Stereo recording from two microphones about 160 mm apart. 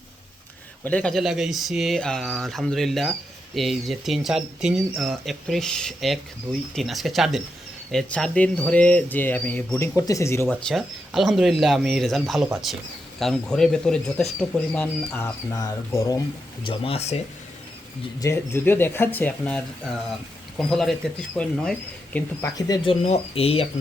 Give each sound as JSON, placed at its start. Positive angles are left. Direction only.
{"t": 0.9, "sound": "speech", "side_deg": 10}
{"t": 10.5, "sound": "speech", "side_deg": 0}
{"t": 15.1, "sound": "speech", "side_deg": 20}
{"t": 16.6, "sound": "speech", "side_deg": 35}
{"t": 18.2, "sound": "speech", "side_deg": 15}
{"t": 20.7, "sound": "speech", "side_deg": 0}
{"t": 22.4, "sound": "speech", "side_deg": 20}